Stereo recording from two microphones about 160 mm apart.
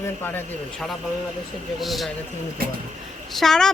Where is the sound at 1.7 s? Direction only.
Centre (ahead or behind).